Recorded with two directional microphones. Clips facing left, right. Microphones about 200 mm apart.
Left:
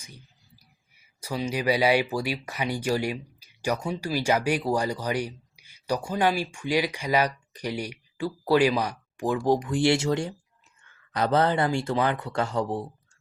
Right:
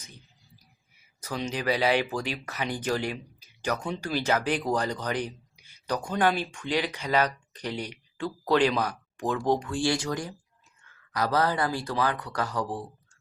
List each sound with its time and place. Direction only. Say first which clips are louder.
1.2 s speech: left 3 dB; 10° left (ahead or behind)